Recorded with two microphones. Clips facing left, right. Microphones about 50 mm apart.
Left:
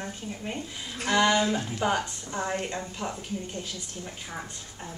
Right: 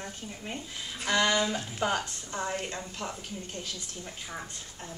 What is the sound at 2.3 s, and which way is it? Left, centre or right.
Speech, centre.